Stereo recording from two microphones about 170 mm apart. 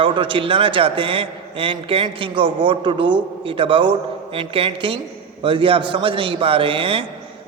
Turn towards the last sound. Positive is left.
turn(degrees=-30)  # may be behind; listen again after turning